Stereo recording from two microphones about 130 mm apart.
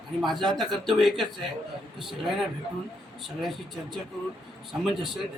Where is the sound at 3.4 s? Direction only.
Centre (ahead or behind).